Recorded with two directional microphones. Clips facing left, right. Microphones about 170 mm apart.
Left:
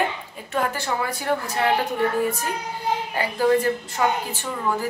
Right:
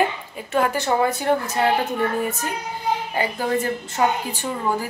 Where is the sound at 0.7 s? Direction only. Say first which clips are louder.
Right 6 dB; 20° right (ahead or behind).